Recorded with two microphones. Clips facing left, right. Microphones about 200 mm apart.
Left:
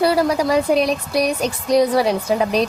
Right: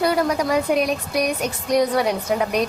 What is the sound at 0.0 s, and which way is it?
A woman's voice, 30° left (ahead or behind).